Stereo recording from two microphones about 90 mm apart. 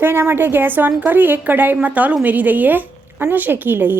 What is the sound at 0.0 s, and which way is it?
A woman's voice, 25° right (ahead or behind).